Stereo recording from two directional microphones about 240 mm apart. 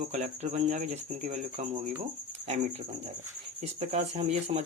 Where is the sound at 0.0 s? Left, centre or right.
Right.